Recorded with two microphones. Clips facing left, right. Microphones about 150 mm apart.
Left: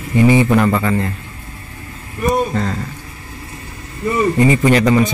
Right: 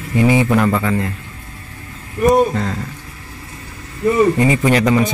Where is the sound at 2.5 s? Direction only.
Centre (ahead or behind).